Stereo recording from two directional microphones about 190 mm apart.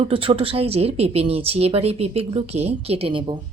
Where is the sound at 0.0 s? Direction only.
30° right (ahead or behind).